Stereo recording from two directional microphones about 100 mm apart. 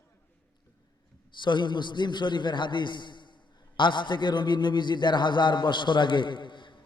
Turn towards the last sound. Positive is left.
turn(degrees=55)  # may be behind; listen again after turning